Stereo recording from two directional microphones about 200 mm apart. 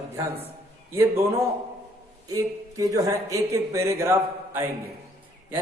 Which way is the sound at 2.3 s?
15° right (ahead or behind).